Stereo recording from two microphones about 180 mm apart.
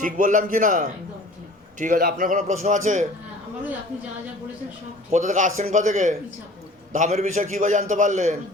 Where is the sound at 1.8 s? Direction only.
55° right (ahead or behind).